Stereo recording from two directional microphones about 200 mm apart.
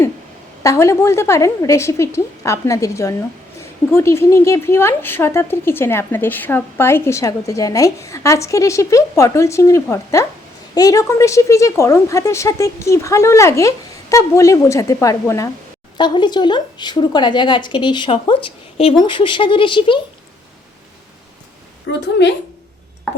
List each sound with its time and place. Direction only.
0.6 s a woman's voice: 15° left (ahead or behind)
21.9 s a woman's voice: 75° left (ahead or behind)